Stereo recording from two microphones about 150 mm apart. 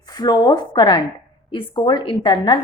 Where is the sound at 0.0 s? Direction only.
25° left (ahead or behind).